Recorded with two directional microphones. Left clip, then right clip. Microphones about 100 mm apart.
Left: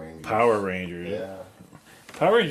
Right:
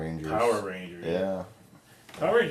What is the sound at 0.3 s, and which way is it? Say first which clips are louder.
Speech: left 5 dB; 45° left (ahead or behind).